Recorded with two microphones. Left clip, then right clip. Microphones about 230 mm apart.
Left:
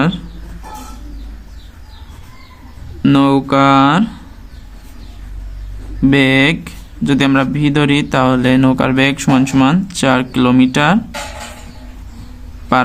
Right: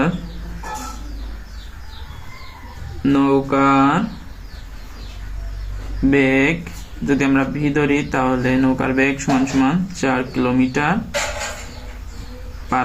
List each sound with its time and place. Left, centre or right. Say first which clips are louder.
3.0 s a man's voice: left 4 dB; left
6.1 s a man's voice: left 4 dB; left